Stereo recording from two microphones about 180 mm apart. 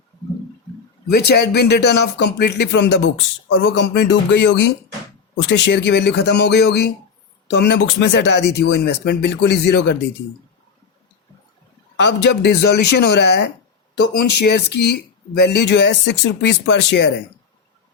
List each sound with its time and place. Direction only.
1.1 s speech: 65° left (ahead or behind)
3.5 s speech: 85° left
11.9 s speech: 70° left (ahead or behind)